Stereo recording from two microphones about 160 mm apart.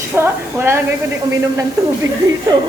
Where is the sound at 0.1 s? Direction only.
15° right (ahead or behind).